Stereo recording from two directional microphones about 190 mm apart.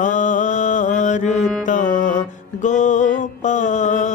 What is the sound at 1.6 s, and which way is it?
Music, 40° left (ahead or behind).